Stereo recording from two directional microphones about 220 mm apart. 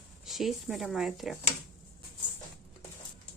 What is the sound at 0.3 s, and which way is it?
Speech, centre (ahead or behind).